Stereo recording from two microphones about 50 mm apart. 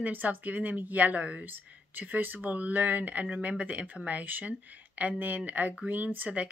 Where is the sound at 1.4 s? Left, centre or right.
Right.